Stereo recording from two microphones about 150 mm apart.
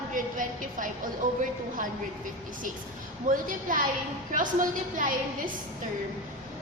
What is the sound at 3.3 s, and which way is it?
Speech, 65° right (ahead or behind).